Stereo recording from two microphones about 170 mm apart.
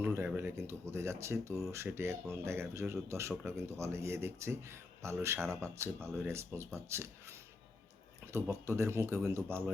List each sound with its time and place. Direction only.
0.0 s speech: 10° right (ahead or behind)